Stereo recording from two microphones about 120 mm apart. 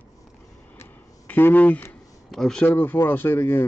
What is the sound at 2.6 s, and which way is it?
Speech, 15° left (ahead or behind).